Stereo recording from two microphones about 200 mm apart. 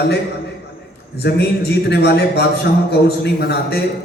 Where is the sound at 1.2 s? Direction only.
55° left (ahead or behind).